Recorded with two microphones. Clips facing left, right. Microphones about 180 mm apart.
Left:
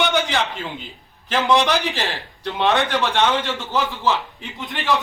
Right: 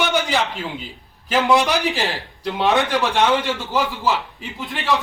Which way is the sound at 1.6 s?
15° right (ahead or behind).